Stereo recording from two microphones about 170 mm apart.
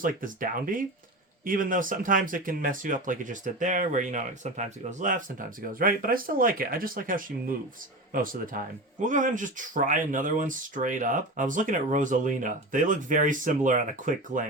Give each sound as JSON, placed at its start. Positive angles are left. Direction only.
{"t": 0.0, "sound": "speech", "side_deg": -55}